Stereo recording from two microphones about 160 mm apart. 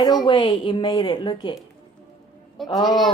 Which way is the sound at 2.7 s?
25° left (ahead or behind).